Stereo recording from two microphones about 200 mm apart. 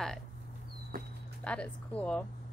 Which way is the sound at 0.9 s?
45° right (ahead or behind).